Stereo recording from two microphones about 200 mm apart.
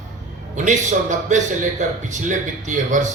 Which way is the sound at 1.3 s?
35° right (ahead or behind).